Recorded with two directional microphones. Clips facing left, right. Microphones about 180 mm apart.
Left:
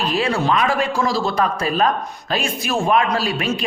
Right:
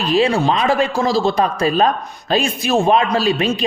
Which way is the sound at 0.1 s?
20° right (ahead or behind).